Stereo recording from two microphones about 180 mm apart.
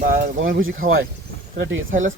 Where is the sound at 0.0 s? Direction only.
55° right (ahead or behind).